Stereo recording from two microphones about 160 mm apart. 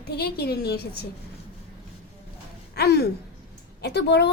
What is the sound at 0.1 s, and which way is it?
Speech, 85° left.